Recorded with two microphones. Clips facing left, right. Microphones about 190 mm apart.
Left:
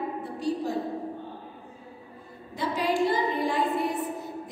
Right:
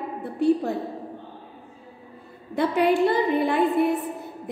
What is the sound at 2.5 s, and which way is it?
A woman's voice, 60° right (ahead or behind).